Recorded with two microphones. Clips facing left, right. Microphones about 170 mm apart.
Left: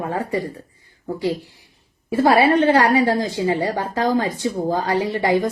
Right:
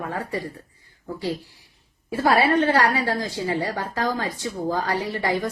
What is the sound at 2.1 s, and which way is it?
A woman's voice, 20° left (ahead or behind).